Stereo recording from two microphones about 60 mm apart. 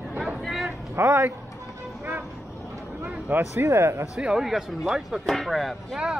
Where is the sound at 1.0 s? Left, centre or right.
Right.